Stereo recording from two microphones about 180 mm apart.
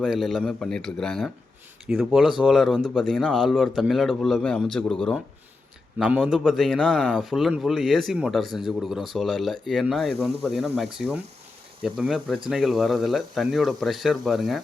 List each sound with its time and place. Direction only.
0.0 s a man's voice: centre (ahead or behind)